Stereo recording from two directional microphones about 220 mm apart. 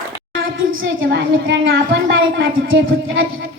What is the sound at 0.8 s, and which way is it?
Child singing, 65° right (ahead or behind).